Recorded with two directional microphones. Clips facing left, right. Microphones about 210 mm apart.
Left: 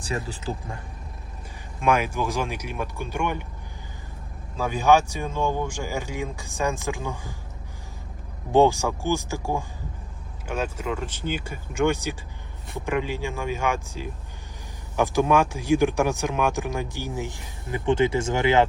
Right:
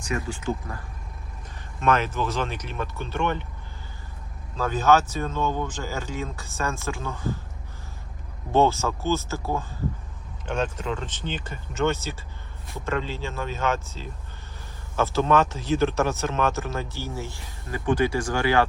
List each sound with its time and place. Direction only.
0.0 s speech: 35° left (ahead or behind)
1.8 s speech: 10° left (ahead or behind)
4.5 s speech: 10° left (ahead or behind)
8.5 s speech: 15° left (ahead or behind)